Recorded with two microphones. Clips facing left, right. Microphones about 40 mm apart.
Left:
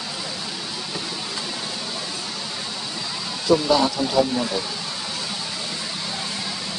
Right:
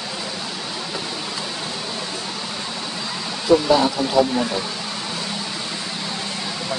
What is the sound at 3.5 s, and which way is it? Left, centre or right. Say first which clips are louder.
Speech: right 2 dB; centre.